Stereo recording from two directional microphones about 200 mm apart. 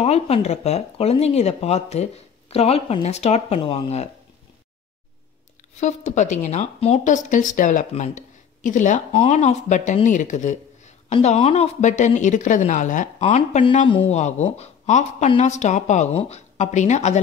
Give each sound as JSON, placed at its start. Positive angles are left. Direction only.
{"t": 0.0, "sound": "speech", "side_deg": 30}
{"t": 5.8, "sound": "speech", "side_deg": 35}